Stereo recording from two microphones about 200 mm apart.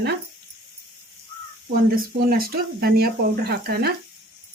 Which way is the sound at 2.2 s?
45° right (ahead or behind).